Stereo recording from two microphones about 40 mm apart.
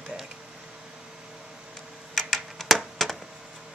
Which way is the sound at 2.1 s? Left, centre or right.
Centre.